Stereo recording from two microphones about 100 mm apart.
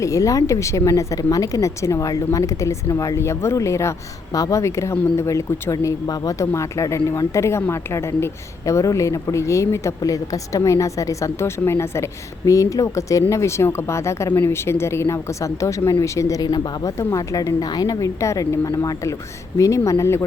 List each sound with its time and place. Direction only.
0.0 s speech: 35° left (ahead or behind)
5.7 s speech: 40° left (ahead or behind)
17.0 s speech: 30° left (ahead or behind)